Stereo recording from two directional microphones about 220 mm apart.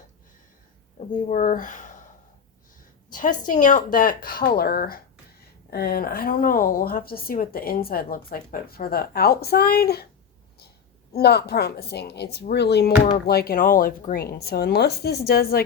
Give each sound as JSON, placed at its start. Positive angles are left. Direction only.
{"t": 0.9, "sound": "speech", "side_deg": 35}
{"t": 3.1, "sound": "speech", "side_deg": 35}
{"t": 11.1, "sound": "speech", "side_deg": 50}